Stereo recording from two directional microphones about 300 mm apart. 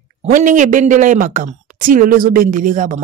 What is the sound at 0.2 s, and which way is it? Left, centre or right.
Speech, right.